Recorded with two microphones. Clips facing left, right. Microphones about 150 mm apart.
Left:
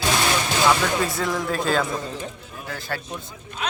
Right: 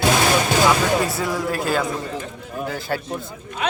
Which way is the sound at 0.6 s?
5° right (ahead or behind).